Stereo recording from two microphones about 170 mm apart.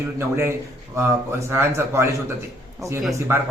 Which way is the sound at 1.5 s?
15° right (ahead or behind).